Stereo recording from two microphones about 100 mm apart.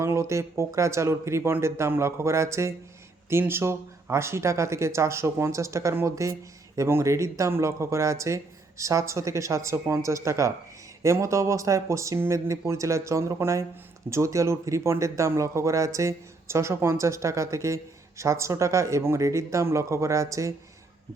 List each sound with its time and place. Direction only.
0.0 s speech: 30° right (ahead or behind)